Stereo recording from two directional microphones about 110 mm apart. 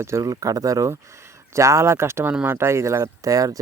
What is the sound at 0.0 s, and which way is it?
Speech, 30° right (ahead or behind).